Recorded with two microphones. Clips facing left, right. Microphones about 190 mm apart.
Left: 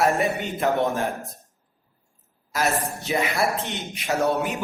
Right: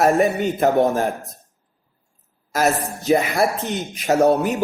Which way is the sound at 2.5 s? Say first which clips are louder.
Right 5 dB; 40° right (ahead or behind).